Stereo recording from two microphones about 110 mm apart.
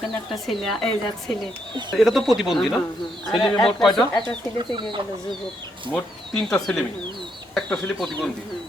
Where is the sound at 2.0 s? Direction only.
Centre (ahead or behind).